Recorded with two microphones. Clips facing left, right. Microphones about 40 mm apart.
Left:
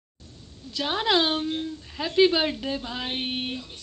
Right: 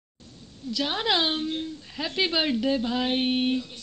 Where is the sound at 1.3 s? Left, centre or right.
Centre.